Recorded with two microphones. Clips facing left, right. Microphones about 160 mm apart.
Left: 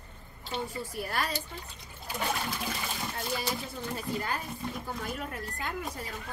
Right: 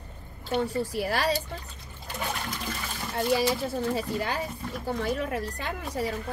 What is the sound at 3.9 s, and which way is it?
Speech, 80° right.